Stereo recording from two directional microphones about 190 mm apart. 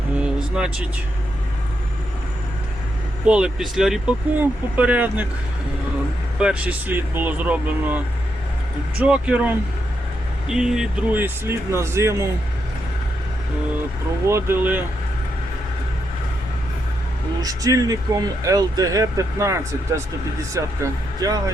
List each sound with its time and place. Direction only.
0.5 s speech: 5° right (ahead or behind)
3.2 s speech: 5° right (ahead or behind)
6.4 s speech: 5° right (ahead or behind)
14.3 s speech: 15° right (ahead or behind)
17.4 s speech: 20° right (ahead or behind)